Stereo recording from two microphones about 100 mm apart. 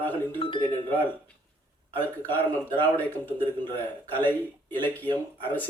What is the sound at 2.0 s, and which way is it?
A man's voice, 20° left (ahead or behind).